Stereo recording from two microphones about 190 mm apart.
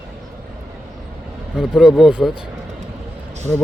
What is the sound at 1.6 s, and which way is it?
Speech, 5° right (ahead or behind).